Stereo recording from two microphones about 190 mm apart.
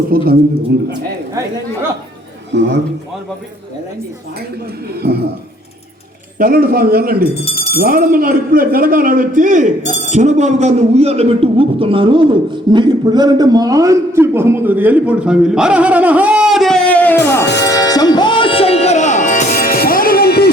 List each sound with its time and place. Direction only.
0.1 s a man's voice: 50° right (ahead or behind)
2.5 s a man's voice: 65° right (ahead or behind)
6.4 s speech: 50° right (ahead or behind); by 17.4 s 10° left (ahead or behind)
17.6 s music: 20° left (ahead or behind); by 20.5 s 55° left (ahead or behind)